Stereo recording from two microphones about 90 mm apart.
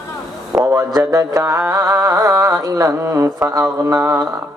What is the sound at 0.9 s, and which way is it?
Mantra, 40° right (ahead or behind).